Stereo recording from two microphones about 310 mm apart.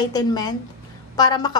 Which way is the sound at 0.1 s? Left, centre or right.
Centre.